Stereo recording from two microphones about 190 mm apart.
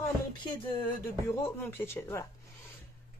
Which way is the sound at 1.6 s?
10° left (ahead or behind).